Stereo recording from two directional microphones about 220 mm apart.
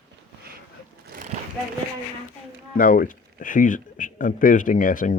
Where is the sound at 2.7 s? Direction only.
40° left (ahead or behind).